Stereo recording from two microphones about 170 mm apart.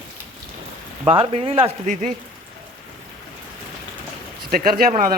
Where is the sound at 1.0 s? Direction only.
35° right (ahead or behind).